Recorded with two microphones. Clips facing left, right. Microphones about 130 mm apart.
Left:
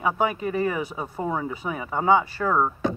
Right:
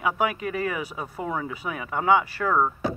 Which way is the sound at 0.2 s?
30° left (ahead or behind).